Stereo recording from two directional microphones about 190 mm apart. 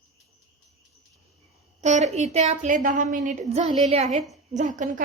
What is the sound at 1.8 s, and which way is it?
A woman's voice, 35° right (ahead or behind).